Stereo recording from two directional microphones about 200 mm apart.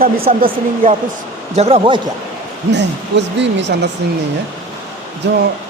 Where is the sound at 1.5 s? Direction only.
30° right (ahead or behind).